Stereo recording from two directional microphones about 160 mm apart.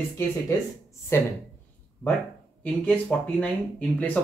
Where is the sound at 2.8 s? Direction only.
10° left (ahead or behind).